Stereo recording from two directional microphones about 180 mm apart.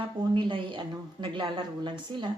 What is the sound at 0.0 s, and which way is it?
Speech, 25° right (ahead or behind).